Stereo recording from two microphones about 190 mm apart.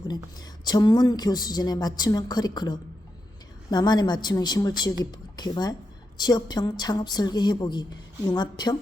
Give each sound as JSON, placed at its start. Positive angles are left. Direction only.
{"t": 0.1, "sound": "a woman's voice", "side_deg": 20}